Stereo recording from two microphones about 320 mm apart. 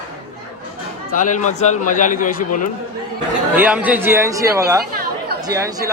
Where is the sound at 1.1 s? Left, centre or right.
Left.